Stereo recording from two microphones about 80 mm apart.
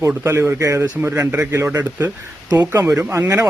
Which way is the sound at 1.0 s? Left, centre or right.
Right.